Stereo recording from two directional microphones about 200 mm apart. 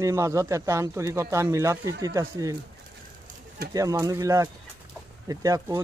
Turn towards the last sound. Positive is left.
turn(degrees=-15)  # may be behind; listen again after turning